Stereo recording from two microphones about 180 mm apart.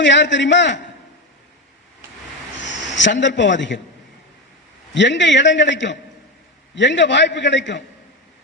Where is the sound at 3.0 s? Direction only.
90° left.